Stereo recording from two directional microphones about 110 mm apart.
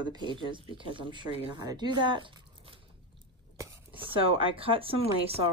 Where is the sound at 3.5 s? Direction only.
30° right (ahead or behind).